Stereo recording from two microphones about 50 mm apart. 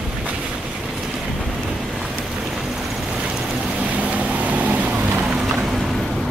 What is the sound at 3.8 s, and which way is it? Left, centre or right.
Vehicle, right.